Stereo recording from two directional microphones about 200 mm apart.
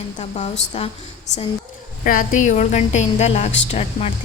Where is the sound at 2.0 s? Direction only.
45° left (ahead or behind).